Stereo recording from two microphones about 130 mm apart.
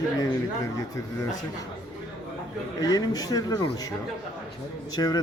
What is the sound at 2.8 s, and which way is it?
Speech, 30° left (ahead or behind).